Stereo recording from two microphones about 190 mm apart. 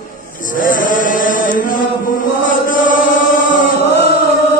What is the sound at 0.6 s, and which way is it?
Chant, 45° left (ahead or behind).